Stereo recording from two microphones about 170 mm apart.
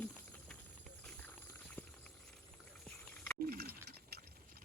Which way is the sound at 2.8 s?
5° left (ahead or behind).